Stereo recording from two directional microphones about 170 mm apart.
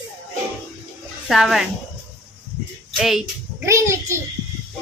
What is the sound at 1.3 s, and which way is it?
Speech, centre (ahead or behind).